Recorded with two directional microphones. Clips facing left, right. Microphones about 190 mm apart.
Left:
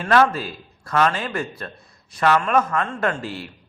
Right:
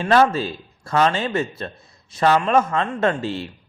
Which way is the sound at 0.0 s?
25° right (ahead or behind).